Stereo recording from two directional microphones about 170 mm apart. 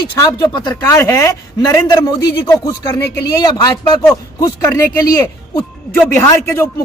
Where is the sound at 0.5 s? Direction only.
25° left (ahead or behind).